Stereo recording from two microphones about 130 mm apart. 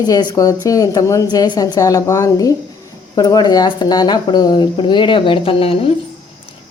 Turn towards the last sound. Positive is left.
turn(degrees=45)  # may be behind; listen again after turning